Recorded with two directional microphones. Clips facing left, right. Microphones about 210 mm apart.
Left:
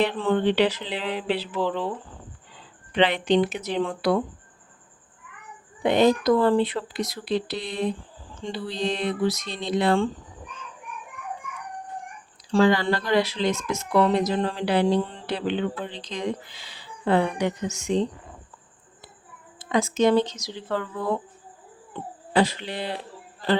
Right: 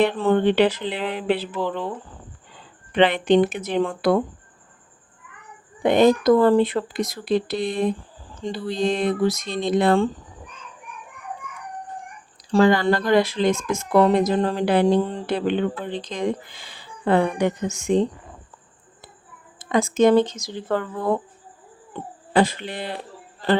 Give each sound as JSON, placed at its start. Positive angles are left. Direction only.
{"t": 0.0, "sound": "speech", "side_deg": -45}
{"t": 1.6, "sound": "speech", "side_deg": -10}
{"t": 2.9, "sound": "speech", "side_deg": -50}
{"t": 5.8, "sound": "speech", "side_deg": -50}
{"t": 12.5, "sound": "speech", "side_deg": -45}
{"t": 19.5, "sound": "speech", "side_deg": -50}
{"t": 22.3, "sound": "speech", "side_deg": -50}